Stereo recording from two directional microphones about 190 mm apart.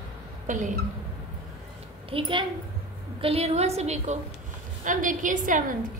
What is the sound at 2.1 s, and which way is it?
A woman's voice, 25° right (ahead or behind).